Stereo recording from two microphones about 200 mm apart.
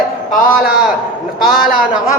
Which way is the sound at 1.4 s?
45° left (ahead or behind).